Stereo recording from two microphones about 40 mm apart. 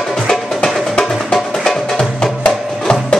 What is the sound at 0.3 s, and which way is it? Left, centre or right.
Music, centre.